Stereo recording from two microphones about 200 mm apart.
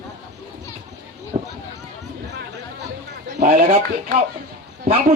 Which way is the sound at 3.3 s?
40° right (ahead or behind).